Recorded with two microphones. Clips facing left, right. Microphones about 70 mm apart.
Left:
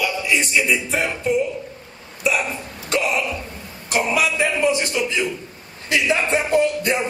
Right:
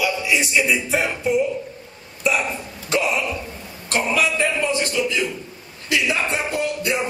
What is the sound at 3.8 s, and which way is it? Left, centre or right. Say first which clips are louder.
A man's voice: left 1 dB; centre.